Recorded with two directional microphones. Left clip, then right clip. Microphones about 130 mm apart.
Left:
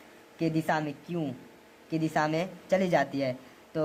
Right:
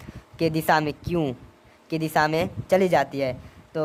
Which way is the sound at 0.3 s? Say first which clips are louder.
Right 7 dB; 85° right.